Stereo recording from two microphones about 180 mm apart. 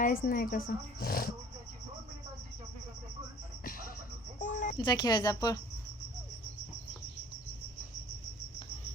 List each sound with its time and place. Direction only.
0.0 s speech: 50° left (ahead or behind)
3.6 s music: 50° left (ahead or behind)
4.4 s a sound: 45° left (ahead or behind)
4.8 s speech: 25° left (ahead or behind)